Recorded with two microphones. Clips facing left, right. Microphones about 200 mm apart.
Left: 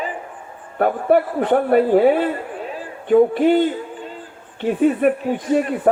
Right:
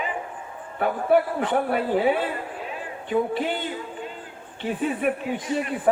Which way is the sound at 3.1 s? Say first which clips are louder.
Left 11 dB; 55° left (ahead or behind).